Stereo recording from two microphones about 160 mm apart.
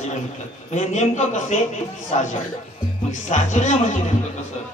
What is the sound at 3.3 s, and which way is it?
Speech, 50° left (ahead or behind).